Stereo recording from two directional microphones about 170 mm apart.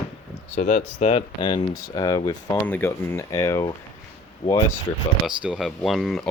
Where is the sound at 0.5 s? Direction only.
45° left (ahead or behind); by 2.6 s 25° left (ahead or behind).